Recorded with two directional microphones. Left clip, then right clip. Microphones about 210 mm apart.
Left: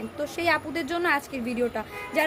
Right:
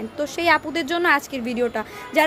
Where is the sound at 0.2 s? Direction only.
25° right (ahead or behind).